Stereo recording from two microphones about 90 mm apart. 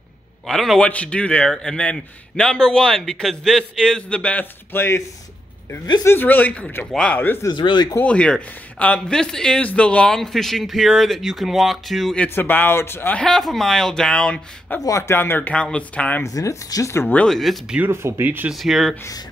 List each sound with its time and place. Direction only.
0.5 s a man's voice: 5° left (ahead or behind)
4.7 s speech: 30° left (ahead or behind)
6.0 s a man's voice: 20° left (ahead or behind)
7.5 s speech: 60° left (ahead or behind)
8.0 s a man's voice: 10° left (ahead or behind)
12.4 s speech: 20° left (ahead or behind)
13.1 s a man's voice: 5° left (ahead or behind)
14.8 s speech: 35° left (ahead or behind)
15.5 s a man's voice: 10° left (ahead or behind)
16.3 s speech: 40° left (ahead or behind)
17.3 s a man's voice: centre (ahead or behind)
17.7 s speech: 25° right (ahead or behind)
18.5 s a man's voice: centre (ahead or behind)